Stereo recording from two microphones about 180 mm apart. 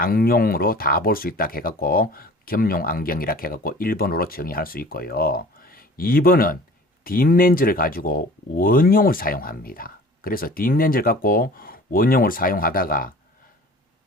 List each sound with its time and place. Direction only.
0.0 s speech: 55° left (ahead or behind)